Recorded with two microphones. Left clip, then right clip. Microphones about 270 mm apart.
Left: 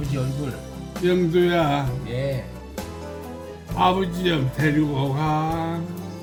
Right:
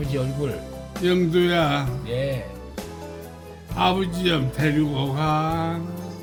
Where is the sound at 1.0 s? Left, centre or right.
Centre.